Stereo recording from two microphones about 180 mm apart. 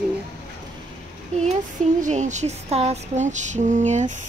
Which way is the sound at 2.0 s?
40° right (ahead or behind).